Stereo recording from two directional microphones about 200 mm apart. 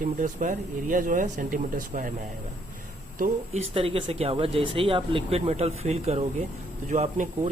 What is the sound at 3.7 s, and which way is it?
Speech, 30° right (ahead or behind).